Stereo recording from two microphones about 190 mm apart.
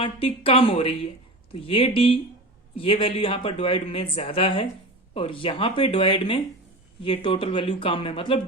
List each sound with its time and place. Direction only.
0.0 s speech: 30° left (ahead or behind)